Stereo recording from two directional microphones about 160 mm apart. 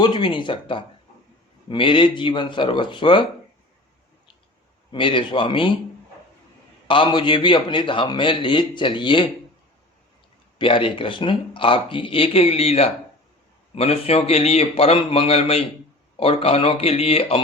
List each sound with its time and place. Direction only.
0.0 s a man's voice: 30° left (ahead or behind)
4.9 s a man's voice: 30° left (ahead or behind)
6.8 s a man's voice: 30° left (ahead or behind)
10.6 s a man's voice: 30° left (ahead or behind)